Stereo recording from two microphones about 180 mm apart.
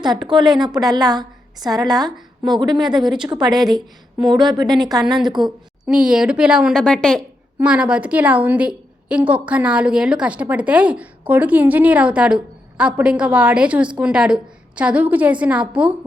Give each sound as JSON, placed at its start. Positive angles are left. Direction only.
{"t": 0.0, "sound": "a woman's voice", "side_deg": -25}
{"t": 5.8, "sound": "a woman's voice", "side_deg": -5}